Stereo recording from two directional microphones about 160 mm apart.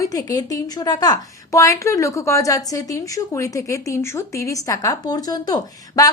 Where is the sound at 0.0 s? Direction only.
20° left (ahead or behind).